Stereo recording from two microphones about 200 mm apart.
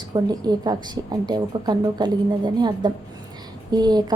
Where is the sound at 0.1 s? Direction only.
20° right (ahead or behind).